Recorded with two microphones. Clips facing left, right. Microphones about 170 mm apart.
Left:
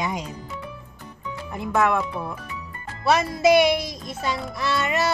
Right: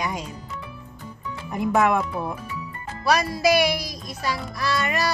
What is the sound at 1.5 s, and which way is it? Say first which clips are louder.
Speech: right 2 dB; 15° right (ahead or behind).